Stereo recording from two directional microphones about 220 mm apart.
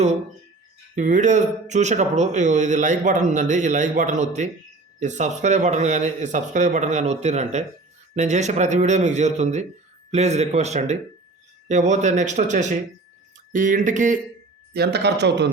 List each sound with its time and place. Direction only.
0.9 s speech: 35° right (ahead or behind)
14.7 s a man's voice: 45° right (ahead or behind)